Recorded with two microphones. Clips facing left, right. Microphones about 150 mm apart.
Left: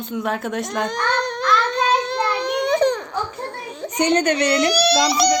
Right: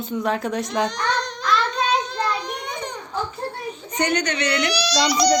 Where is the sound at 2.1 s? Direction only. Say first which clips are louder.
Left 4 dB; 70° left (ahead or behind); by 3.0 s 90° left.